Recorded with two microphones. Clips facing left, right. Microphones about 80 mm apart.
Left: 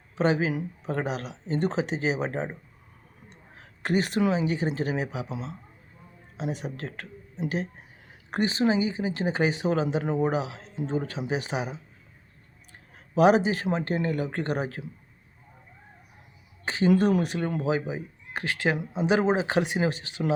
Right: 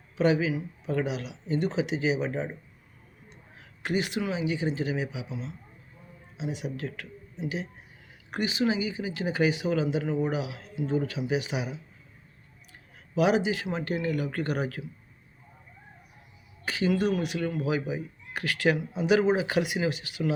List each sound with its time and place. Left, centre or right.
0.2 s speech: left
7.3 s speech: left
13.1 s speech: left
16.6 s a sound: left
16.9 s speech: left